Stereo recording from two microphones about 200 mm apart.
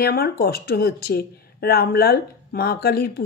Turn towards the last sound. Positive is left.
turn(degrees=50)  # may be behind; listen again after turning